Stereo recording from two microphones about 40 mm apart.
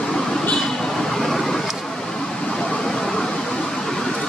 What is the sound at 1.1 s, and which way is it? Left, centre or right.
Vehicle, centre.